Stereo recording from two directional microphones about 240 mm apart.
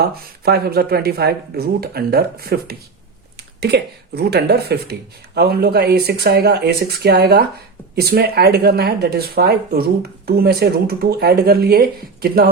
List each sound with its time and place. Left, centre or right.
0.0 s speech: right